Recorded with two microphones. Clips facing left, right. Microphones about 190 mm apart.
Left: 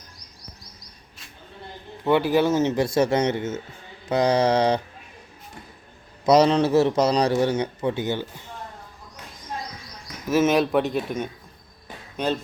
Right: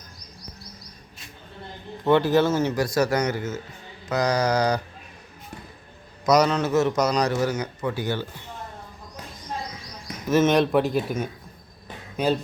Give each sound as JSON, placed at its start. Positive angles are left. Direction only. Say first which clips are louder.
{"t": 2.0, "sound": "a man's voice", "louder": "even", "side_deg": 10}
{"t": 6.2, "sound": "a man's voice", "louder": "left 3 dB", "side_deg": 30}
{"t": 10.2, "sound": "speech", "louder": "even", "side_deg": 5}